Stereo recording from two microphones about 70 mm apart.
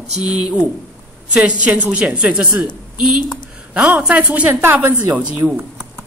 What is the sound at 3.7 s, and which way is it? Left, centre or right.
A woman's voice, right.